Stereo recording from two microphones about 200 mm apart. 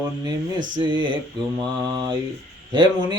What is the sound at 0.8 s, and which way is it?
Speech, 25° right (ahead or behind).